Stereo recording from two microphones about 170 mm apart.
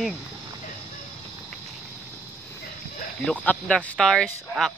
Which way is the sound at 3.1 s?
10° left (ahead or behind).